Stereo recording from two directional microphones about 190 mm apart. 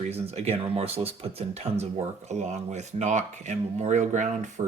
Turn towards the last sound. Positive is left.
turn(degrees=-40)  # may be behind; listen again after turning